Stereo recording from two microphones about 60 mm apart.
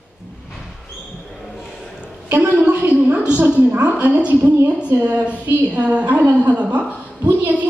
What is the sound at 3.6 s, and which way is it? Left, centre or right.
A woman's voice, right.